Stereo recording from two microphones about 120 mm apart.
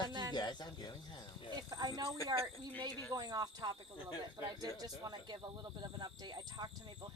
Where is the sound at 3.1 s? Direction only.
35° right (ahead or behind).